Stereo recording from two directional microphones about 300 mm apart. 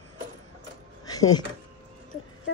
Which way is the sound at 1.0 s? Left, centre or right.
Centre.